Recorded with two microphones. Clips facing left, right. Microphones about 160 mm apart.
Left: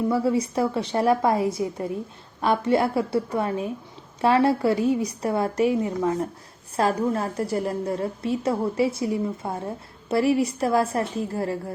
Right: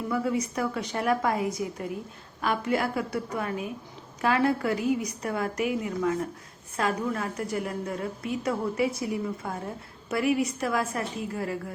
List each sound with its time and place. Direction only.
0.1 s a woman's voice: 30° left (ahead or behind)